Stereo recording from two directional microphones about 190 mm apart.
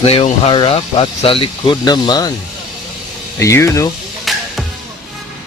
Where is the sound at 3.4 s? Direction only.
15° left (ahead or behind).